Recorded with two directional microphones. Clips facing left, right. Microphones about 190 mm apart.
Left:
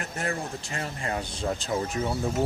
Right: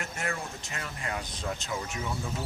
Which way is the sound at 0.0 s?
35° left (ahead or behind).